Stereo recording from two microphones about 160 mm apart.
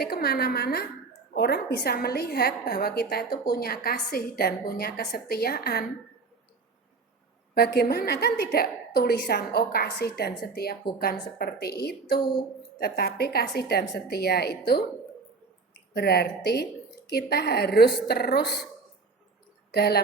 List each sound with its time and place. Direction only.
0.0 s a woman's voice: 80° left
7.5 s a woman's voice: 75° left (ahead or behind)
15.9 s a woman's voice: 80° left
19.7 s a woman's voice: 85° left